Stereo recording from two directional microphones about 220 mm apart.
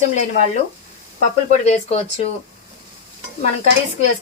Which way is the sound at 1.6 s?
30° left (ahead or behind).